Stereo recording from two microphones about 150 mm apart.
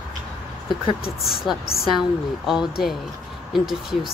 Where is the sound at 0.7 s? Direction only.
35° left (ahead or behind).